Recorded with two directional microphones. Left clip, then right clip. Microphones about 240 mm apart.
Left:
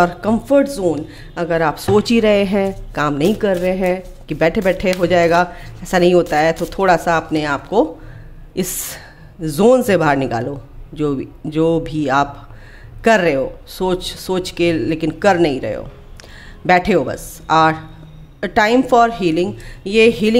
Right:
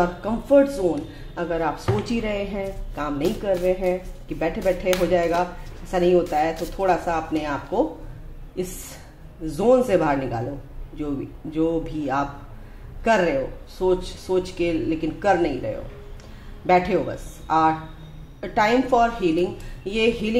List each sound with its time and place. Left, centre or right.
0.0 s speech: left